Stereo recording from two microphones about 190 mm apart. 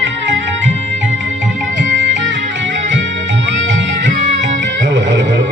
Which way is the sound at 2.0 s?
70° right (ahead or behind).